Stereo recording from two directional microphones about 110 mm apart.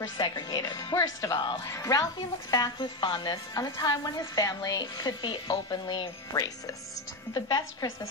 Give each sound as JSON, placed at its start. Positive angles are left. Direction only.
{"t": 0.2, "sound": "speech", "side_deg": 35}